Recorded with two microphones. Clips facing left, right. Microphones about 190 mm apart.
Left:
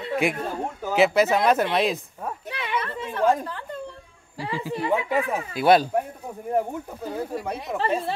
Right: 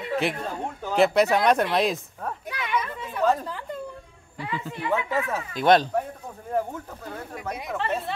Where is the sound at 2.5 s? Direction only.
30° left (ahead or behind).